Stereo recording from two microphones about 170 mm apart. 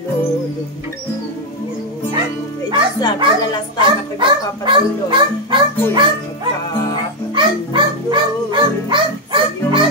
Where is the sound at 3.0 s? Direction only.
25° left (ahead or behind).